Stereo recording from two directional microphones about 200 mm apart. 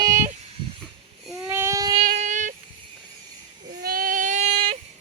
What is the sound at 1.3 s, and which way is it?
Baby cry, 15° right (ahead or behind).